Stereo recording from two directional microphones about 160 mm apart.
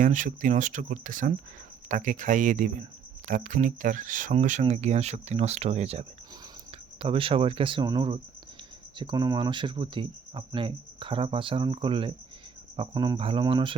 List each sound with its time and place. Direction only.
0.0 s speech: 55° right (ahead or behind); by 13.7 s 30° right (ahead or behind)